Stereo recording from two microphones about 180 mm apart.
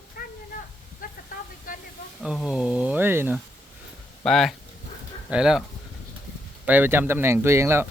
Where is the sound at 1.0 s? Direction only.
50° left (ahead or behind).